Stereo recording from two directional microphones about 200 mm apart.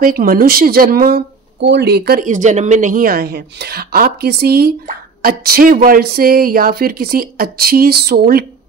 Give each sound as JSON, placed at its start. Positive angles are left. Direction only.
{"t": 0.0, "sound": "speech", "side_deg": -45}